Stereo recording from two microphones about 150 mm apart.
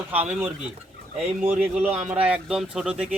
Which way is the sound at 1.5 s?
10° right (ahead or behind).